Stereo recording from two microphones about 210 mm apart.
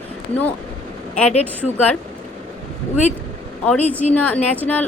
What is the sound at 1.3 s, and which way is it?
Speech, 30° left (ahead or behind).